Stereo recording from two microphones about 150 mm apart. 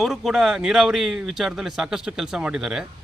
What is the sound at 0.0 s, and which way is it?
A man's voice, centre (ahead or behind).